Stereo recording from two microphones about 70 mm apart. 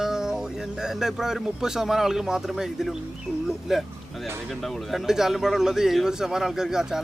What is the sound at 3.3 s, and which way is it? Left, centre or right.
Speech, left.